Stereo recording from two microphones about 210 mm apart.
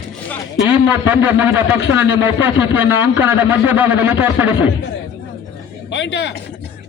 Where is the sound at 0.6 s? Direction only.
10° right (ahead or behind).